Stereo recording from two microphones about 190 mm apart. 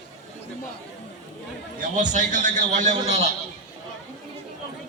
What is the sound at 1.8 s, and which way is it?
A man's voice, 40° right (ahead or behind).